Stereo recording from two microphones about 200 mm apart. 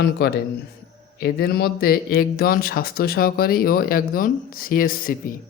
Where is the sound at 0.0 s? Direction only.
50° left (ahead or behind).